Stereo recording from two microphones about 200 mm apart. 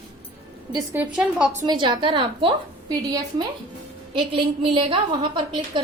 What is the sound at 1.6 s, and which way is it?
Speech, 20° right (ahead or behind).